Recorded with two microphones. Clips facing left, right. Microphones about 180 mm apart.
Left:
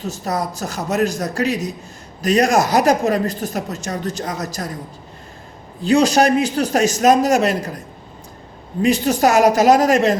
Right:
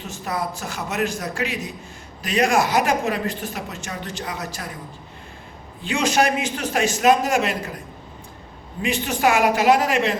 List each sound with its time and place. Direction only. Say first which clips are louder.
0.0 s a woman's voice: left 4 dB; 40° left (ahead or behind)
5.8 s a woman's voice: left 6 dB; 40° left (ahead or behind)
8.8 s a woman's voice: left 6 dB; 40° left (ahead or behind)